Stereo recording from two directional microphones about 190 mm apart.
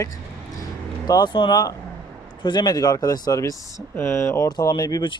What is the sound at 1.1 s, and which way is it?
Speech, 25° left (ahead or behind).